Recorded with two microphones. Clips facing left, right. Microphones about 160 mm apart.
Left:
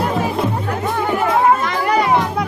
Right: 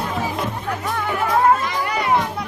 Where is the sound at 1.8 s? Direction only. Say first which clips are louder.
Left 5 dB; 40° left (ahead or behind).